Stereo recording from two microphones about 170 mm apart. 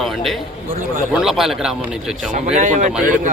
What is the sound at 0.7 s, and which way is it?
Speech, 50° right (ahead or behind).